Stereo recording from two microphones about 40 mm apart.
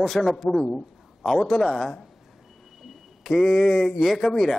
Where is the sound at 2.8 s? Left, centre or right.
Centre.